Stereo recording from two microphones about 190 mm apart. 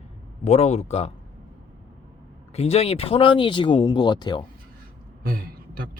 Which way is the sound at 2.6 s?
35° left (ahead or behind).